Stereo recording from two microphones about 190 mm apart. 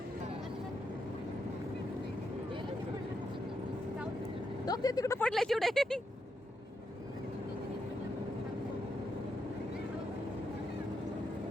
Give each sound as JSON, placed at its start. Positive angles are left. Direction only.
{"t": 4.6, "sound": "speech", "side_deg": 20}
{"t": 5.2, "sound": "speech", "side_deg": 0}